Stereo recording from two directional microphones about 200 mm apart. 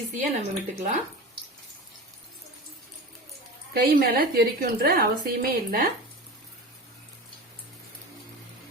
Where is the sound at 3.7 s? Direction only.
50° right (ahead or behind).